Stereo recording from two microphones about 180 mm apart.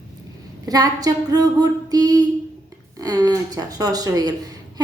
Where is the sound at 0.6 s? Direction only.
20° right (ahead or behind).